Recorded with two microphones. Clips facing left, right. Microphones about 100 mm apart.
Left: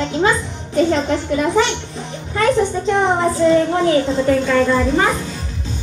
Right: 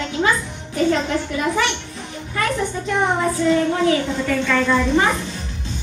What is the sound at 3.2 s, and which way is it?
A child's voice, 30° left (ahead or behind).